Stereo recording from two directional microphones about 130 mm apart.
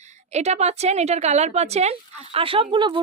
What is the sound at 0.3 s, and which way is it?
A woman's voice, 60° right (ahead or behind).